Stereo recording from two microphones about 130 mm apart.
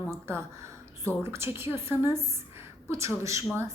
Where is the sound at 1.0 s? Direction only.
20° right (ahead or behind).